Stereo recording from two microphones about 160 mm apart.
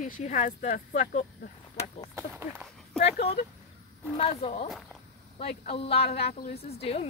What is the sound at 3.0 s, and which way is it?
Speech, 90° left.